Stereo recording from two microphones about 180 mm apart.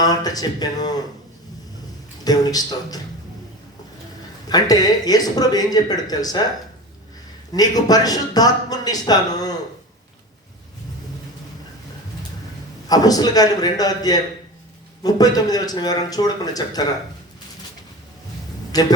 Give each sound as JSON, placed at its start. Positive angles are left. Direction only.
{"t": 0.0, "sound": "a man's voice", "side_deg": 20}
{"t": 2.2, "sound": "a man's voice", "side_deg": 20}
{"t": 4.4, "sound": "a man's voice", "side_deg": 20}
{"t": 7.5, "sound": "a man's voice", "side_deg": 20}
{"t": 12.9, "sound": "a man's voice", "side_deg": 20}
{"t": 18.7, "sound": "speech", "side_deg": 20}